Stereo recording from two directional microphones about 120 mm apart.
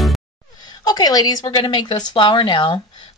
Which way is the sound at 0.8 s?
30° left (ahead or behind).